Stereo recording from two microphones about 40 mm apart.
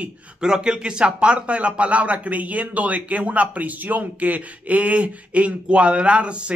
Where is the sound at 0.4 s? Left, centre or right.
Centre.